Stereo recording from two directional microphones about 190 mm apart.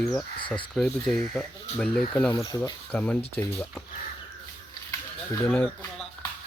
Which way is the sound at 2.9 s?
10° left (ahead or behind).